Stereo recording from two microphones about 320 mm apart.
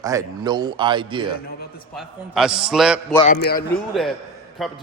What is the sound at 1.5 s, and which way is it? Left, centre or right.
Speech, left.